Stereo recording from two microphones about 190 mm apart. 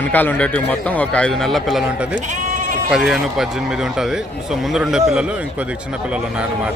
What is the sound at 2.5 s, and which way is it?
Sheep, 40° right (ahead or behind).